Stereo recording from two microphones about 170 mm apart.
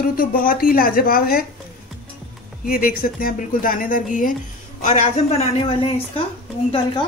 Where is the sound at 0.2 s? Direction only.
55° left (ahead or behind).